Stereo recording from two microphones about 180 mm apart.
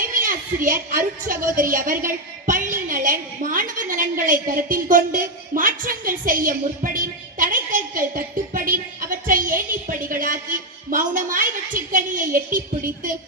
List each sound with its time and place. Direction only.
0.0 s a woman's voice: 50° right (ahead or behind)
7.3 s a sound: 45° right (ahead or behind)
9.0 s a woman's voice: 50° right (ahead or behind)